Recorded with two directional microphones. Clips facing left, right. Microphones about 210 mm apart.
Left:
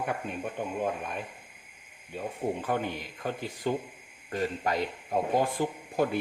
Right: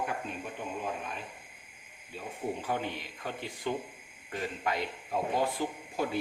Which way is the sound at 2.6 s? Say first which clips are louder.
Left 3 dB; 55° left (ahead or behind).